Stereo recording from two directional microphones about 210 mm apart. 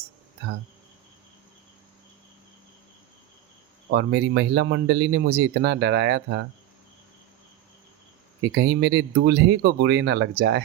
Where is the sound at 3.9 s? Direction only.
50° right (ahead or behind).